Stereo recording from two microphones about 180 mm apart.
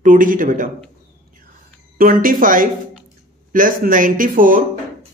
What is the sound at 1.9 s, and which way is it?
Speech, 50° right (ahead or behind).